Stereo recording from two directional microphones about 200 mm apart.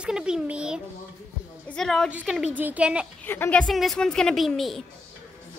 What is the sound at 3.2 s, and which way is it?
A woman's voice, 10° left (ahead or behind).